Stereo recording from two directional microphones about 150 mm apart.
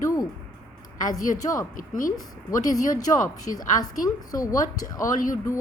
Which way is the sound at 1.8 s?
65° left (ahead or behind).